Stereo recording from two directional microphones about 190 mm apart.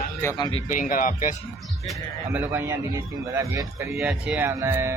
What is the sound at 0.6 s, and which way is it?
Speech, 45° left (ahead or behind).